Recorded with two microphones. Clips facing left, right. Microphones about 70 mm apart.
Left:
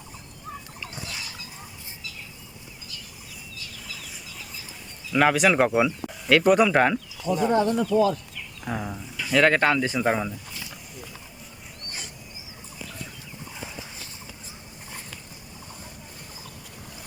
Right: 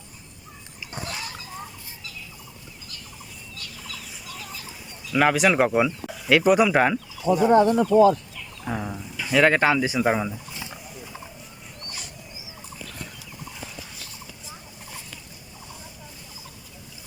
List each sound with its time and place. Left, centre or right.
0.9 s a sound: right
5.1 s speech: centre
7.3 s speech: centre
7.8 s speech: right
8.6 s speech: centre
10.5 s wild animals: right